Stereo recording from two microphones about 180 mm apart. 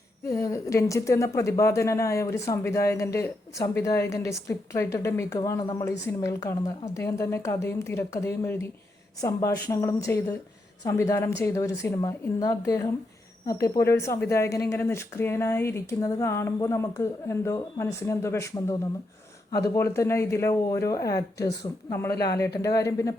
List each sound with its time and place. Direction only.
0.3 s speech: 15° left (ahead or behind)
14.0 s speech: 15° left (ahead or behind)